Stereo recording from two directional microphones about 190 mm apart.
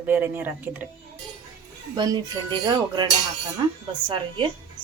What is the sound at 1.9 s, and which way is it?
Speech, 25° right (ahead or behind).